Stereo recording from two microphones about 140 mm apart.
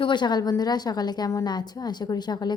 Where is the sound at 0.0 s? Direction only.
35° left (ahead or behind).